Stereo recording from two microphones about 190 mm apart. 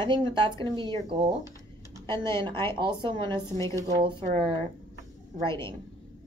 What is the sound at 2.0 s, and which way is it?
Speech, 15° left (ahead or behind).